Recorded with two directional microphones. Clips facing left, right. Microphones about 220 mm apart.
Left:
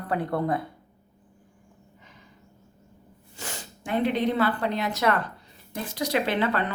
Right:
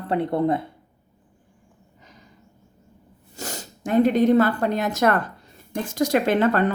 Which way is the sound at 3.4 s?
40° right (ahead or behind).